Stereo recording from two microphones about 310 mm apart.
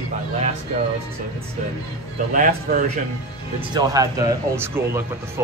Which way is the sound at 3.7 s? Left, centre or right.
Centre.